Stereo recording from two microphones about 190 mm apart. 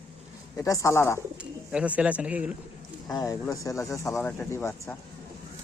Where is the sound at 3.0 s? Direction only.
20° left (ahead or behind).